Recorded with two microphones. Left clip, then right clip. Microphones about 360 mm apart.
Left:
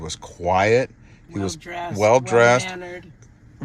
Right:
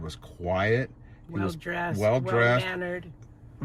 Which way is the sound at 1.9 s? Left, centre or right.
Centre.